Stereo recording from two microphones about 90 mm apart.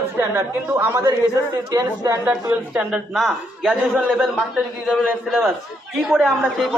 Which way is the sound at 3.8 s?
20° right (ahead or behind).